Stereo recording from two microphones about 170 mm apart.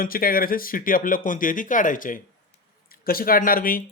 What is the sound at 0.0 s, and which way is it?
Speech, 60° left (ahead or behind).